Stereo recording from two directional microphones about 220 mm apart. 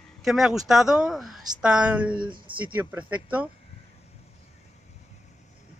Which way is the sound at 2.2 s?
20° right (ahead or behind).